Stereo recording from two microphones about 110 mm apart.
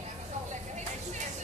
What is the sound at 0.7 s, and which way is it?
Vehicle, 90° right.